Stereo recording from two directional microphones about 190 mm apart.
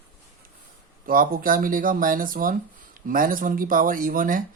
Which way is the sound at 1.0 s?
50° right (ahead or behind).